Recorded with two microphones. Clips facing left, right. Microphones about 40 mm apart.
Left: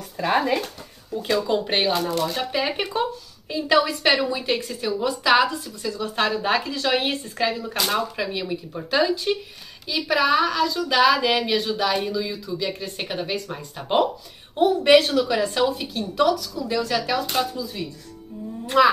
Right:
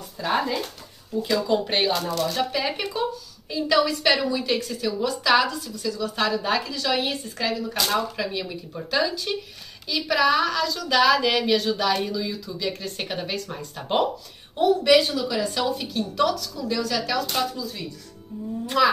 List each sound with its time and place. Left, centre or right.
0.2 s speech: left
1.5 s a woman's voice: centre; by 7.3 s left
7.3 s a woman's voice: left
14.6 s speech: left
15.0 s speech: left
15.5 s a woman's voice: centre
16.6 s a woman's voice: left
18.8 s speech: left